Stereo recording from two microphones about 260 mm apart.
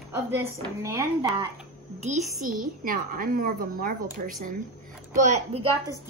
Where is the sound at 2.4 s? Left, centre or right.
Right.